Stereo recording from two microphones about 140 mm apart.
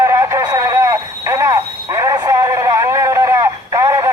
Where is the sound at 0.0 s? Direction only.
25° right (ahead or behind).